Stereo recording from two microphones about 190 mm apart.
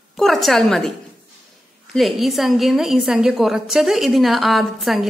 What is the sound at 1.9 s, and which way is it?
A woman's voice, centre (ahead or behind).